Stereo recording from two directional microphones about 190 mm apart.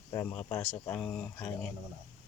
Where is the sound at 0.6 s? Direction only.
5° left (ahead or behind).